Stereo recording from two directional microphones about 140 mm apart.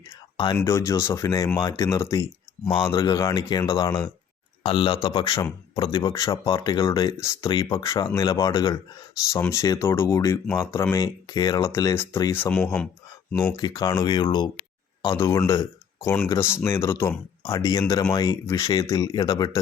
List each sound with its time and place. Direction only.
0.6 s speech: 20° left (ahead or behind)
4.6 s speech: 40° left (ahead or behind)
6.3 s speech: 40° left (ahead or behind)
6.6 s speech: 25° left (ahead or behind); by 12.9 s 10° left (ahead or behind)
13.6 s speech: 30° left (ahead or behind)
15.1 s speech: 20° left (ahead or behind)
16.0 s speech: 10° left (ahead or behind); by 19.5 s 30° left (ahead or behind)